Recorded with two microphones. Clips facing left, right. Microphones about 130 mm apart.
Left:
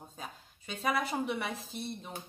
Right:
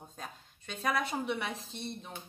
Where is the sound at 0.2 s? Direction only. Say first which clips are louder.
Even; centre (ahead or behind).